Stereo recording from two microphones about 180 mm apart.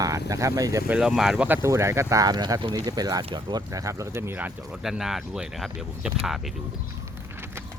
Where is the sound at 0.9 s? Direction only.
5° right (ahead or behind).